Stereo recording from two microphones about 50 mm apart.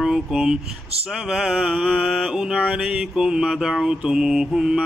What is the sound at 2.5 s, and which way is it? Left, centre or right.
Mantra, centre.